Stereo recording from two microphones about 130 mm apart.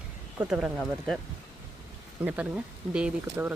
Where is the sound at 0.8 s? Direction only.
5° left (ahead or behind).